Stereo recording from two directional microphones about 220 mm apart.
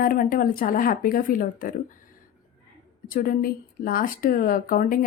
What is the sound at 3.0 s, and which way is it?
Speech, 40° left (ahead or behind).